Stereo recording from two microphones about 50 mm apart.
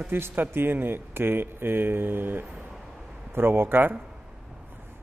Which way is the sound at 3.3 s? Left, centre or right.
Right.